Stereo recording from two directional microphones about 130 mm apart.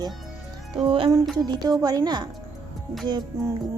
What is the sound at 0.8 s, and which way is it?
Speech, 40° right (ahead or behind).